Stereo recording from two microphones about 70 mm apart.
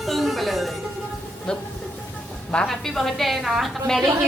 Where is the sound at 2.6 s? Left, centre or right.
Centre.